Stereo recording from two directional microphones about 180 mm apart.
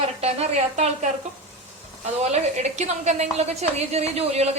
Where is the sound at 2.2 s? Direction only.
40° right (ahead or behind).